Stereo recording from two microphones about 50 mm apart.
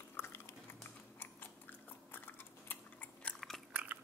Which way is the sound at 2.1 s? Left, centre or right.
Left.